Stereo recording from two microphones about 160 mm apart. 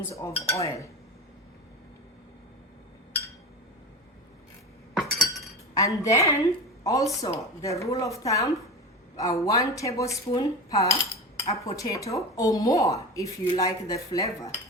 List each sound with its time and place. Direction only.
0.1 s speech: 20° left (ahead or behind)
4.9 s chink: centre (ahead or behind)
5.7 s speech: 20° left (ahead or behind)
10.7 s cutlery: 20° left (ahead or behind)
11.6 s speech: 20° left (ahead or behind)